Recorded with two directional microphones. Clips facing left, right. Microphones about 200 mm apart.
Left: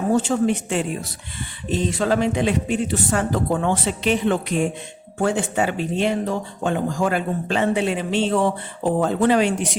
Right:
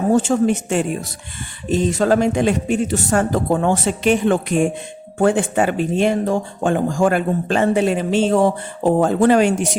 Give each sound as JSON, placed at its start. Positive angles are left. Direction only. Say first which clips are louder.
{"t": 0.1, "sound": "speech", "louder": "right 3 dB", "side_deg": -45}